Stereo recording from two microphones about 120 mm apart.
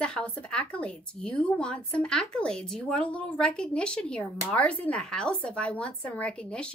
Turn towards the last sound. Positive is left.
turn(degrees=10)  # may be behind; listen again after turning